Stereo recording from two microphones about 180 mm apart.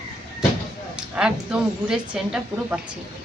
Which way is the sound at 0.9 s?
5° right (ahead or behind).